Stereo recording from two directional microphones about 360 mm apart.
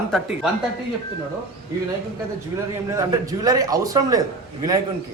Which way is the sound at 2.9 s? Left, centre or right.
Centre.